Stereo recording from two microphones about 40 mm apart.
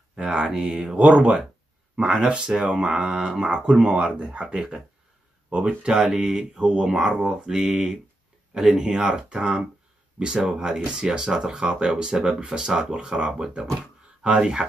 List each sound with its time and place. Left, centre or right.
0.2 s speech: right
1.1 s speech: right
2.0 s speech: right
6.0 s speech: centre